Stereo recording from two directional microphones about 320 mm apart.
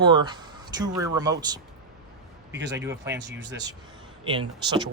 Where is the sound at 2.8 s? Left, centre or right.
Centre.